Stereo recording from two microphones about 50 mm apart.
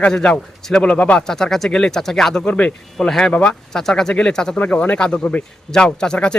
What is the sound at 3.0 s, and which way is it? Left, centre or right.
A man's voice, centre.